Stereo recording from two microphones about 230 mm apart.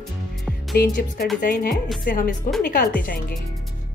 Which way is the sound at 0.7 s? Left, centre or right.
Left.